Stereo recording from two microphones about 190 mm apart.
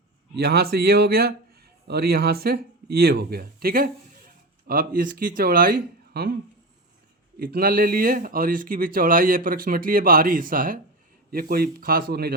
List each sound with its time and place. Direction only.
0.3 s speech: 60° right (ahead or behind)
7.3 s speech: 50° right (ahead or behind)